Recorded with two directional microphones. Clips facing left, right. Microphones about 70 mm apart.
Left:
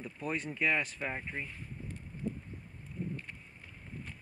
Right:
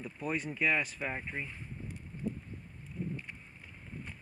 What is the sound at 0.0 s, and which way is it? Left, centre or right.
Speech, centre.